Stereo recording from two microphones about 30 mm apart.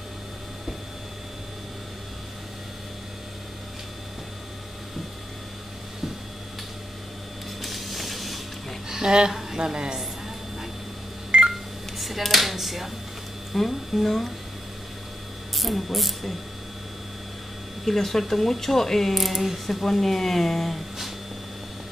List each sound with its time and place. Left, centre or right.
7.6 s music: centre
8.8 s a woman's voice: right
11.3 s telephone dialing: right
12.3 s speech: centre
15.5 s speech: centre
17.8 s speech: centre
19.1 s speech: centre